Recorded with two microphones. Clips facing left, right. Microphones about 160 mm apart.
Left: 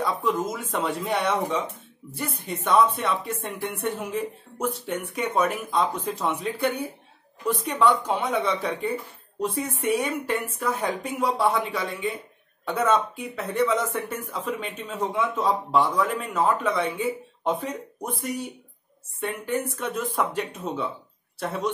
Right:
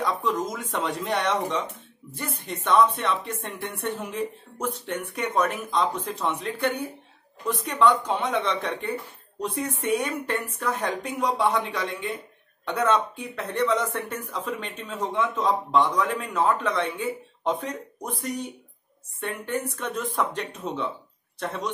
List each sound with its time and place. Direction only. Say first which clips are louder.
0.0 s speech: left 1 dB; 5° left (ahead or behind)